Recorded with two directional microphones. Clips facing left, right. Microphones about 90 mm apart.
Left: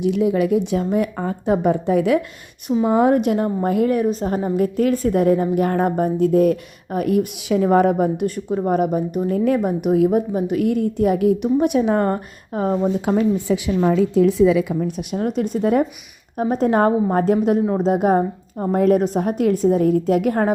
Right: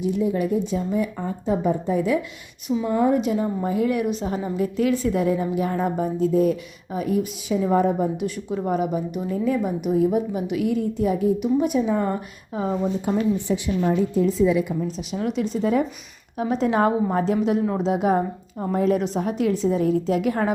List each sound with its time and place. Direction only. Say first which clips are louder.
0.0 s a woman's voice: left 5 dB; 90° left; by 2.2 s 70° left (ahead or behind)
2.8 s speech: left 5 dB; 90° left
3.2 s a woman's voice: left 4 dB; 60° left (ahead or behind)
3.9 s a woman's voice: left 4 dB; 40° left (ahead or behind); by 8.3 s 70° left (ahead or behind)
8.4 s a woman's voice: left 5 dB; 40° left (ahead or behind); by 10.1 s 60° left (ahead or behind)
10.1 s a woman's voice: left 4 dB; 45° left (ahead or behind)
13.5 s speech: left 4 dB; 90° left
14.1 s a woman's voice: left 5 dB; 80° left; by 15.2 s 60° left (ahead or behind)
15.2 s a woman's voice: left 3 dB; 45° left (ahead or behind)